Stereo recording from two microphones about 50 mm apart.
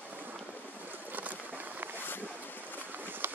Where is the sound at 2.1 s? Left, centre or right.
Left.